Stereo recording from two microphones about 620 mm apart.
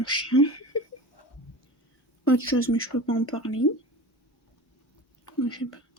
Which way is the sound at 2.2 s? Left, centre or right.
Centre.